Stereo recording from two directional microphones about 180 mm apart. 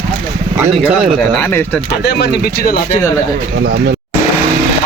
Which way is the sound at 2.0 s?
65° left (ahead or behind).